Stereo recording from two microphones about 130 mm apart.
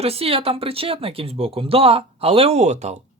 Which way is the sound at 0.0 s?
50° right (ahead or behind).